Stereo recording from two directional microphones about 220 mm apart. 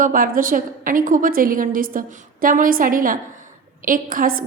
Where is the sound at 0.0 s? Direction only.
40° right (ahead or behind).